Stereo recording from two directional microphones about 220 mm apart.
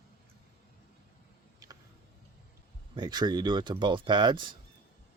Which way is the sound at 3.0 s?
20° right (ahead or behind).